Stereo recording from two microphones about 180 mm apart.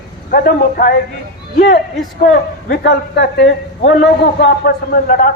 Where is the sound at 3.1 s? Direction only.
70° left (ahead or behind).